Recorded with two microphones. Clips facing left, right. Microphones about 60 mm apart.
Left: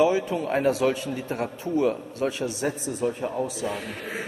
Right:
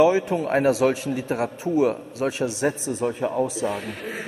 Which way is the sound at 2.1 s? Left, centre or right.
Right.